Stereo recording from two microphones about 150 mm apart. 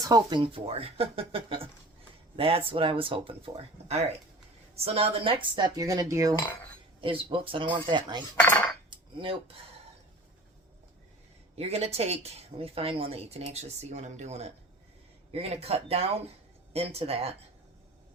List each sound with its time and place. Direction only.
0.0 s speech: 25° right (ahead or behind)
7.0 s speech: 35° right (ahead or behind)
8.4 s dishes: 10° left (ahead or behind)
8.9 s dishes: 35° right (ahead or behind)
11.5 s speech: 45° right (ahead or behind)